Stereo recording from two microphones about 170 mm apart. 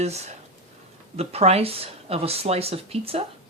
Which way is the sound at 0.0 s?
40° right (ahead or behind).